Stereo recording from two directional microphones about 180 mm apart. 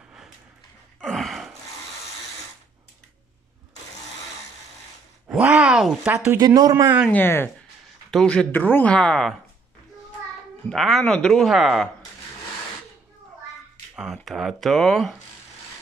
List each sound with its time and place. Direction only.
1.0 s gasp: centre (ahead or behind)
5.3 s speech: 5° right (ahead or behind)
6.4 s speech: 20° right (ahead or behind)
7.1 s speech: 10° left (ahead or behind)
10.7 s speech: centre (ahead or behind)
13.9 s speech: centre (ahead or behind)